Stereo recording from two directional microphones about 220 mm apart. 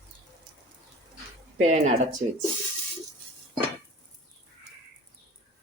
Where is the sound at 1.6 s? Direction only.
35° right (ahead or behind).